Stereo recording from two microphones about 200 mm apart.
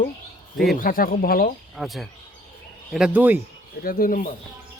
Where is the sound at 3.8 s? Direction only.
45° left (ahead or behind).